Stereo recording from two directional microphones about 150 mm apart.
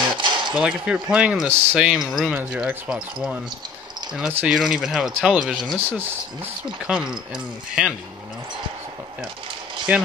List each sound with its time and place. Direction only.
0.2 s a sound: 30° right (ahead or behind)
0.6 s speech: 5° right (ahead or behind)
4.5 s speech: centre (ahead or behind)
5.9 s speech: 15° right (ahead or behind)
9.9 s speech: 10° right (ahead or behind)